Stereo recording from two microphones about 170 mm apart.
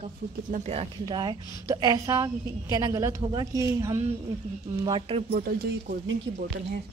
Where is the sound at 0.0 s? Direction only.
40° right (ahead or behind).